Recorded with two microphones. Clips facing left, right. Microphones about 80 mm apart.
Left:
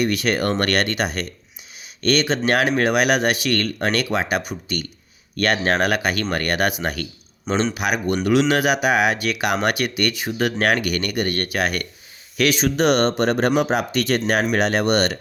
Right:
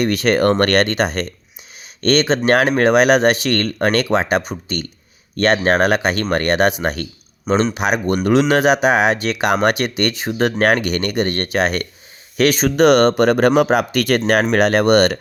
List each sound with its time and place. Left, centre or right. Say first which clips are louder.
0.0 s speech: right 5 dB; right
12.4 s speech: right 5 dB; right